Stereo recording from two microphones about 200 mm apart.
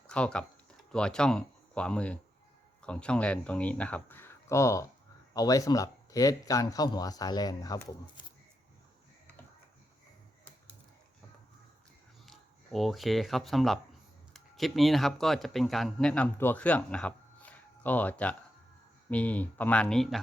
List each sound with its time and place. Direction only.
0.1 s speech: 5° left (ahead or behind); by 8.3 s 20° left (ahead or behind)
12.2 s speech: centre (ahead or behind)